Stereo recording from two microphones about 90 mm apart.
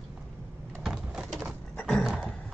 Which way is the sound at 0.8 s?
5° right (ahead or behind).